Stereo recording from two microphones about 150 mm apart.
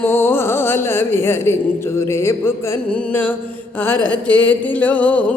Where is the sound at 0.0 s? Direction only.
15° left (ahead or behind).